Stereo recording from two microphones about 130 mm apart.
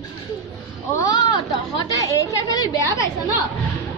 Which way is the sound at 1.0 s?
30° left (ahead or behind).